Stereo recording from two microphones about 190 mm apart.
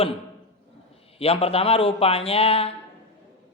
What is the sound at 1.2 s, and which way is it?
A man's voice, 30° left (ahead or behind).